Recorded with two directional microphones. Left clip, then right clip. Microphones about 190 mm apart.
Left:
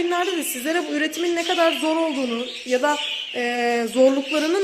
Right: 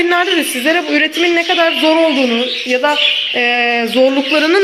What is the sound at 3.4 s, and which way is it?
Speech, 20° left (ahead or behind).